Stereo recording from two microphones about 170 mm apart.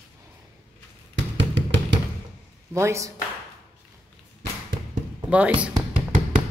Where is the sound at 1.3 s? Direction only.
90° right.